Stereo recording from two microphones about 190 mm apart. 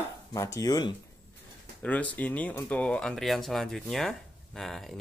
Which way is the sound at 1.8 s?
10° left (ahead or behind).